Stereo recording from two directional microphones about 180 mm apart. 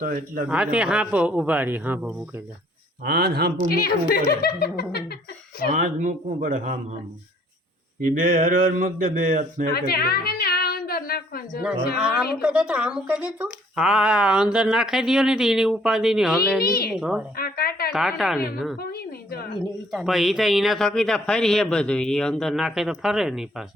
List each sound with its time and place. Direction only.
0.0 s speech: 50° right (ahead or behind)
0.4 s a man's voice: 5° right (ahead or behind)
3.0 s speech: 65° right (ahead or behind)
3.7 s a woman's voice: 55° left (ahead or behind)
5.6 s speech: 45° right (ahead or behind)
8.0 s speech: 50° right (ahead or behind)
9.7 s a sound: 60° left (ahead or behind)
11.9 s speech: 5° right (ahead or behind)
16.6 s a woman's voice: 60° left (ahead or behind)
16.9 s speech: 5° right (ahead or behind)
17.3 s a sound: 55° left (ahead or behind)
17.9 s speech: centre (ahead or behind)
18.8 s a sound: 60° left (ahead or behind)
19.5 s speech: centre (ahead or behind)